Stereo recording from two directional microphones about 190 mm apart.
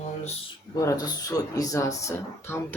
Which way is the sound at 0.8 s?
20° left (ahead or behind).